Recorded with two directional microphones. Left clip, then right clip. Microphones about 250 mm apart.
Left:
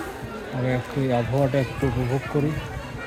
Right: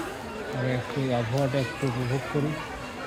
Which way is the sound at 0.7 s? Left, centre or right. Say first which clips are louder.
Left 5 dB; left.